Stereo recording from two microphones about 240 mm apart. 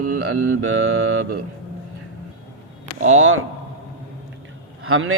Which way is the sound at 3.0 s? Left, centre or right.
Right.